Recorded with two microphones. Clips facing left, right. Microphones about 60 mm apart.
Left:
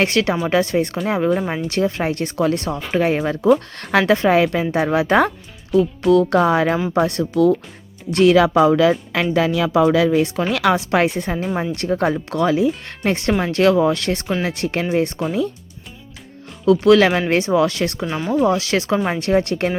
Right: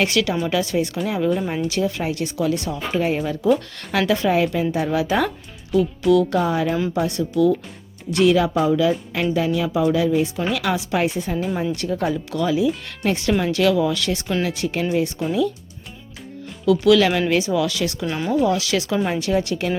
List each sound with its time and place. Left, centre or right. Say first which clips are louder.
0.0 s speech: left 2 dB; left
4.4 s a woman's voice: left 3 dB; left
5.7 s speech: left 2 dB; left
6.4 s a woman's voice: left 4 dB; left
8.4 s a woman's voice: left 5 dB; left
11.3 s speech: left 1 dB; left
11.7 s speech: left 3 dB; left
16.6 s speech: left 3 dB; left
18.0 s speech: left 1 dB; centre
18.4 s speech: left 2 dB; left